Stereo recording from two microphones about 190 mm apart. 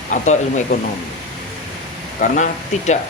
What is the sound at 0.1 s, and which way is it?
Speech, 40° left (ahead or behind).